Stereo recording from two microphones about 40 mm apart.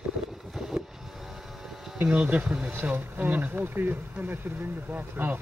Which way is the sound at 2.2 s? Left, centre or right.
Right.